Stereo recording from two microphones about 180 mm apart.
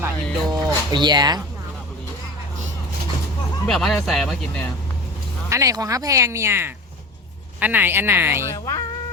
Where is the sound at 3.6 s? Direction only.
Centre (ahead or behind).